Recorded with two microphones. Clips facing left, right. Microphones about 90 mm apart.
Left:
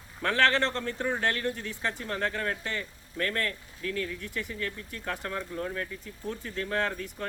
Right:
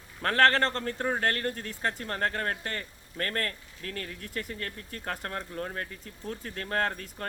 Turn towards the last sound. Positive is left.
turn(degrees=-50)  # may be behind; listen again after turning